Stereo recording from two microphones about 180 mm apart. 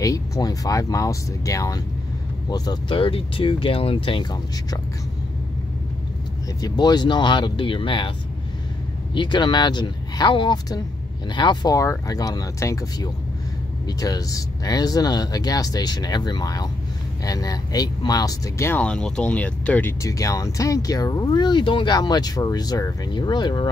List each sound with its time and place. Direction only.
0.0 s speech: 20° left (ahead or behind)
6.6 s speech: 25° left (ahead or behind)
9.1 s speech: 25° left (ahead or behind)